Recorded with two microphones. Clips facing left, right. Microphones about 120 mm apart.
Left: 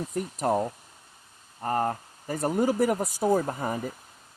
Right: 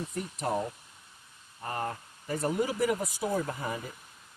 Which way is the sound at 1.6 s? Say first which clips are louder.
Left 7 dB; 40° left (ahead or behind).